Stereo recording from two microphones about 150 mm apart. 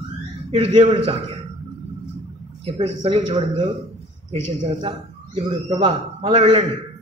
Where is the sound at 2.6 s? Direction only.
40° right (ahead or behind).